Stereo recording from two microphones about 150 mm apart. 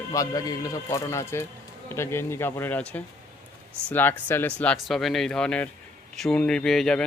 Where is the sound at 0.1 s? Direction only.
25° left (ahead or behind).